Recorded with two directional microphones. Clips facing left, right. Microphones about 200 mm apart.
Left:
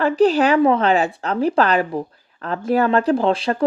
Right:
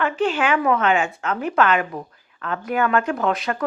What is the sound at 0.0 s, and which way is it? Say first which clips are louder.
Speech: left 6 dB; 35° left (ahead or behind).